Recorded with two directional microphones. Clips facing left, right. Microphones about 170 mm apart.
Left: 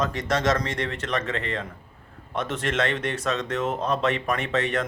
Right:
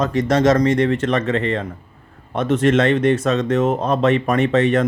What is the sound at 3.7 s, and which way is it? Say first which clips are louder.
Speech: right 6 dB; 55° right (ahead or behind).